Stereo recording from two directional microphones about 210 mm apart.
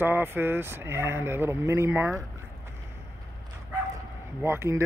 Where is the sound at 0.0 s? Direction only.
10° right (ahead or behind).